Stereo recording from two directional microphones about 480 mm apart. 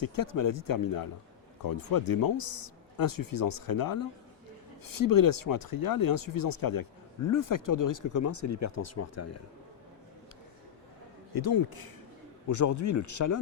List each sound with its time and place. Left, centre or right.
0.0 s speech: left
11.3 s speech: left
12.5 s speech: left